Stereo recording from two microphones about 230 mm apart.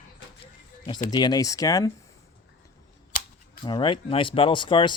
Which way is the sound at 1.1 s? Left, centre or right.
Centre.